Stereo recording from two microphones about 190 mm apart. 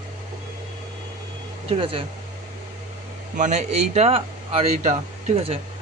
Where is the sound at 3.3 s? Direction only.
40° right (ahead or behind).